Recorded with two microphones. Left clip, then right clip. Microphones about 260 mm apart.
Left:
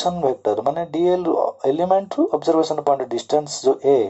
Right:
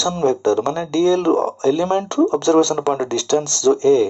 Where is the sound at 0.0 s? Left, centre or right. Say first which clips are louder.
Right 2 dB; right.